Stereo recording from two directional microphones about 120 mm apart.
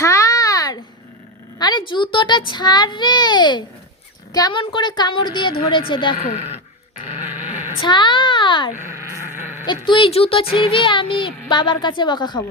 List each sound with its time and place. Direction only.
0.0 s a sound: 25° left (ahead or behind)
1.5 s a child's voice: 40° left (ahead or behind)
6.2 s speech: 70° left (ahead or behind)
7.8 s a child's voice: 40° left (ahead or behind)
8.8 s a sound: 20° right (ahead or behind)
9.8 s speech: 45° left (ahead or behind)